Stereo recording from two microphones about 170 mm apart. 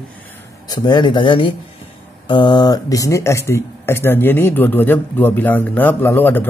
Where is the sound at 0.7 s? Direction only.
25° left (ahead or behind).